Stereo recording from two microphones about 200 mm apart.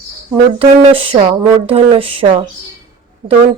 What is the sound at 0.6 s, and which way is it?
Speech, 25° right (ahead or behind).